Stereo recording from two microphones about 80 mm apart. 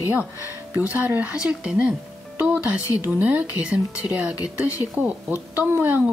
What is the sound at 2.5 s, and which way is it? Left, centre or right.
Speech, centre.